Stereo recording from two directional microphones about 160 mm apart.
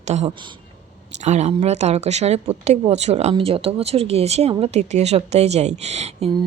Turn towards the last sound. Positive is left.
turn(degrees=-40)  # may be behind; listen again after turning